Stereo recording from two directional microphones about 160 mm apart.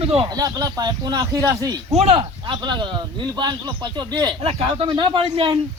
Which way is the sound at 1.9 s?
40° right (ahead or behind).